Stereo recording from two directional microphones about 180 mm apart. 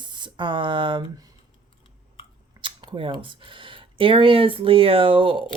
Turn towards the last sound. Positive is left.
turn(degrees=-30)  # may be behind; listen again after turning